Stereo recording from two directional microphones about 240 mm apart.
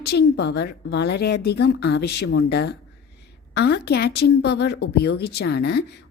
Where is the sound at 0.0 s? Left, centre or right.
Left.